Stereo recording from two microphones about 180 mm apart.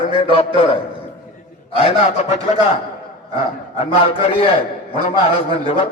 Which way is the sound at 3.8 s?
30° left (ahead or behind).